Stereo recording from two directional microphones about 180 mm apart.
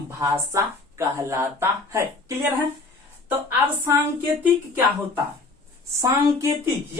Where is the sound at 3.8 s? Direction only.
10° right (ahead or behind).